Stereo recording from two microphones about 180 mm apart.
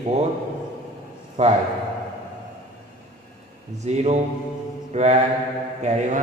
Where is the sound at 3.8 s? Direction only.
35° right (ahead or behind).